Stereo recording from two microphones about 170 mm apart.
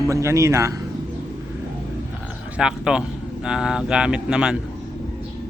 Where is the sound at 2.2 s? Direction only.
5° right (ahead or behind).